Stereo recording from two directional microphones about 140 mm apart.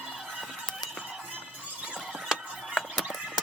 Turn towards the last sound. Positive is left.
turn(degrees=0)  # may be behind; listen again after turning